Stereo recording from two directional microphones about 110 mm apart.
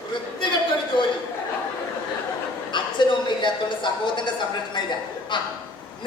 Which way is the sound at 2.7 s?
45° left (ahead or behind).